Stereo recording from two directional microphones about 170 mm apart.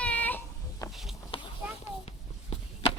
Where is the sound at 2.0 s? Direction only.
35° left (ahead or behind).